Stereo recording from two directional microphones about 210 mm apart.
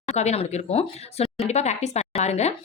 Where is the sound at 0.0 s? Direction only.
30° left (ahead or behind).